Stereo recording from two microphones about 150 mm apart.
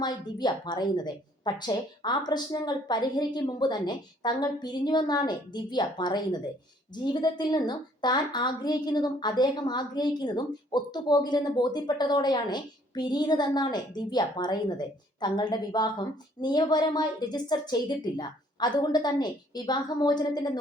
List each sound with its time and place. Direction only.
0.0 s a woman's voice: 30° left (ahead or behind)